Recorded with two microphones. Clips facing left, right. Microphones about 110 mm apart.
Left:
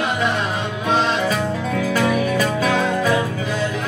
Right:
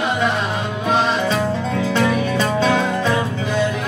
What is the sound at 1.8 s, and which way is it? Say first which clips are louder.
Music: even; 25° right (ahead or behind).